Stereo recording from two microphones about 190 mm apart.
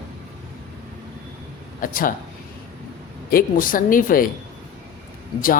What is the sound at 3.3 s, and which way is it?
Speech, 45° left (ahead or behind).